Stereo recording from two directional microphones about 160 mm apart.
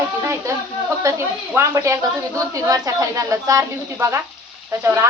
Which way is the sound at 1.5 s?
20° right (ahead or behind).